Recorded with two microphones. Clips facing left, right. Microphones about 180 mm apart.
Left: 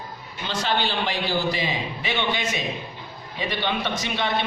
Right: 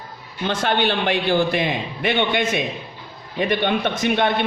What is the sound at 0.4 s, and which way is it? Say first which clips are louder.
Speech: right 5 dB; 55° right (ahead or behind).